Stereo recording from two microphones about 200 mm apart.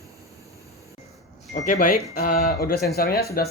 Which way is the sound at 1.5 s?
40° left (ahead or behind).